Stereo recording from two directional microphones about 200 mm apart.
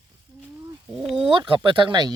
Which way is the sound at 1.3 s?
25° right (ahead or behind).